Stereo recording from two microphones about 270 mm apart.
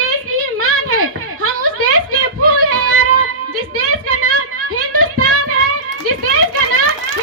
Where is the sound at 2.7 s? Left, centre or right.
Right.